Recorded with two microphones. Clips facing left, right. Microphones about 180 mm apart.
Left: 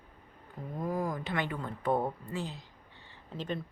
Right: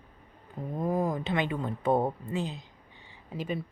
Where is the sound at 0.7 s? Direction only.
25° right (ahead or behind).